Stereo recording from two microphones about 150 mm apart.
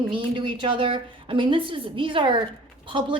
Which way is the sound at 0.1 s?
35° right (ahead or behind).